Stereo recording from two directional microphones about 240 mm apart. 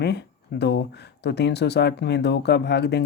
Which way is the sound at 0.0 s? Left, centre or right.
Left.